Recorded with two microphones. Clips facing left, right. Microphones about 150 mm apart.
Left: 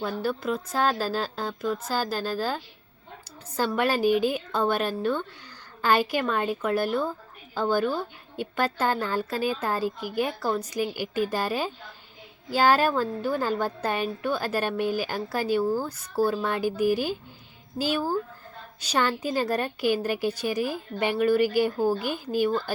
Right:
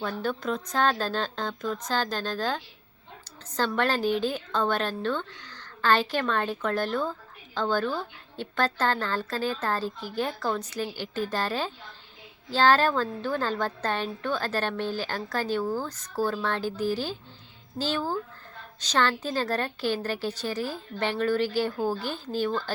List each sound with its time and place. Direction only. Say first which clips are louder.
0.0 s a woman's voice: left 2 dB; 5° left (ahead or behind)